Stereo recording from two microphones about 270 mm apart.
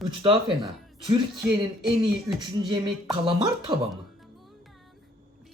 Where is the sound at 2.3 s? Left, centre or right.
Centre.